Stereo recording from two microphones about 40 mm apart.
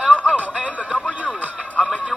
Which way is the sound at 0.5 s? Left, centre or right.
Right.